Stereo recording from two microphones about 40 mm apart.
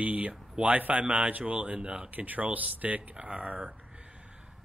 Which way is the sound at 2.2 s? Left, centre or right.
Right.